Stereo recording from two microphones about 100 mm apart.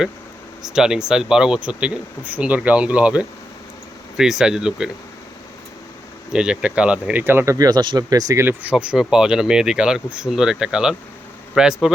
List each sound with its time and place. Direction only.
0.6 s speech: 5° right (ahead or behind)
6.3 s speech: 10° right (ahead or behind); by 8.4 s 35° right (ahead or behind)
8.4 s speech: 10° right (ahead or behind)